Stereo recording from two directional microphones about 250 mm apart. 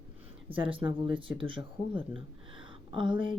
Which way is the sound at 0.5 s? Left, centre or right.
Right.